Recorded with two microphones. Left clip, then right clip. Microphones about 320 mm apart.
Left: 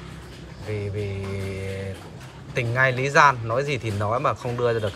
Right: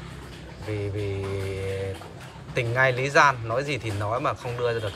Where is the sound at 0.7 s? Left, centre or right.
Centre.